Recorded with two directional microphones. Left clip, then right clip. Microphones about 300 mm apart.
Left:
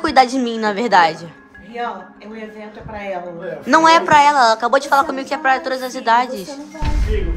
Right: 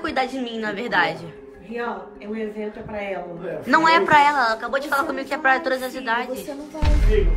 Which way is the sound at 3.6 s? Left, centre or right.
Centre.